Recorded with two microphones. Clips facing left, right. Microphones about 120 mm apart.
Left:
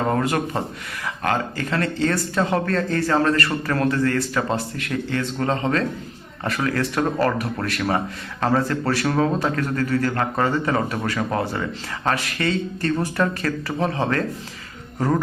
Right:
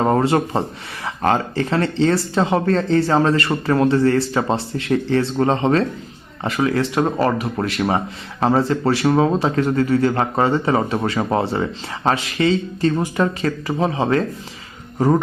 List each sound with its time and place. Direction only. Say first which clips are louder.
0.0 s speech: right 5 dB; 30° right (ahead or behind)
14.9 s insect: right 5 dB; 25° right (ahead or behind)